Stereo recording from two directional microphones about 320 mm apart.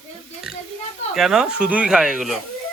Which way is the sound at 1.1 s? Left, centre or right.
Centre.